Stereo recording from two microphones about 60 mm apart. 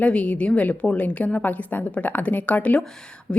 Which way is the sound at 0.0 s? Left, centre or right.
Left.